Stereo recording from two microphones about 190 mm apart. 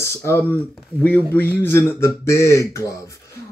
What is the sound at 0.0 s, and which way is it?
A man's voice, 15° left (ahead or behind).